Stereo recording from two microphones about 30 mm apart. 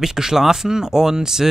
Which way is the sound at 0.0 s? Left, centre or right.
Centre.